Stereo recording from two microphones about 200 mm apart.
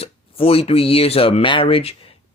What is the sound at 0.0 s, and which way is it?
Speech, 30° left (ahead or behind).